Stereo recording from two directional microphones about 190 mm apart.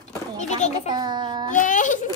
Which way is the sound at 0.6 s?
35° left (ahead or behind).